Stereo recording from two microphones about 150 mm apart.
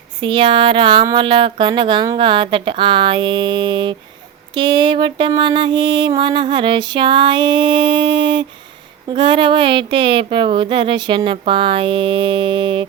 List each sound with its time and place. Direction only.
0.2 s mantra: 35° right (ahead or behind)